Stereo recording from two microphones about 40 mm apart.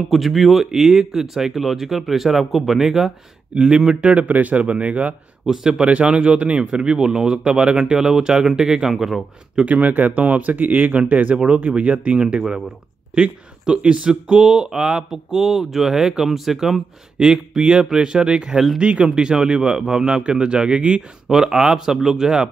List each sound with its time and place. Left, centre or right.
0.1 s speech: centre
3.5 s speech: right
5.5 s speech: centre
5.9 s speech: right
8.9 s a man's voice: centre
9.7 s speech: right
14.3 s speech: centre
15.0 s speech: centre; by 21.0 s right
21.3 s speech: centre